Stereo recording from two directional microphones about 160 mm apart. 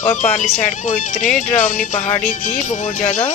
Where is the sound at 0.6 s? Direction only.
50° left (ahead or behind).